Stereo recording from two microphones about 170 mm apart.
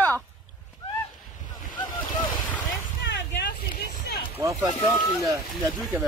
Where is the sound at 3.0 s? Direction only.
90° left.